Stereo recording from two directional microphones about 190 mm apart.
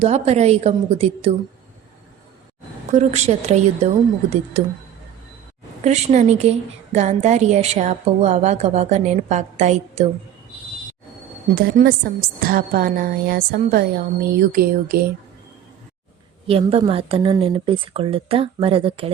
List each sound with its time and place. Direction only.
0.0 s a woman's voice: 35° right (ahead or behind)
2.9 s a woman's voice: 35° right (ahead or behind)
5.8 s a woman's voice: 35° right (ahead or behind)
11.5 s a woman's voice: 50° right (ahead or behind)
16.5 s speech: 30° right (ahead or behind)